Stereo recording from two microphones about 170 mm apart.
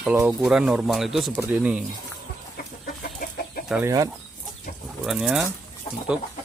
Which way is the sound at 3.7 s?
15° right (ahead or behind).